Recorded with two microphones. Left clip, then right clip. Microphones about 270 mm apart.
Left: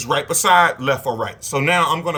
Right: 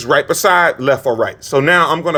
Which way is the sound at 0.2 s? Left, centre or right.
Right.